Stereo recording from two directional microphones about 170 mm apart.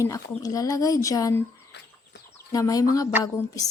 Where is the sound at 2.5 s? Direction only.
20° left (ahead or behind).